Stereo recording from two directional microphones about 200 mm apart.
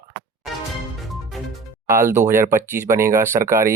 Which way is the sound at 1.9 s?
15° right (ahead or behind).